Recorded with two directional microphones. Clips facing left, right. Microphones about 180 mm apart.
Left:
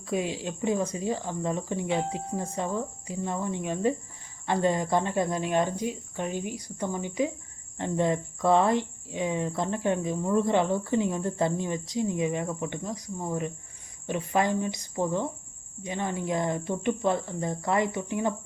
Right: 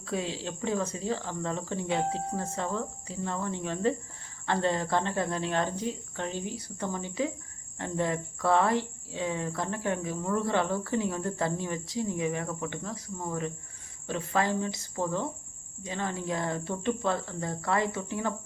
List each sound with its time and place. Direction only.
0.0 s speech: 15° left (ahead or behind)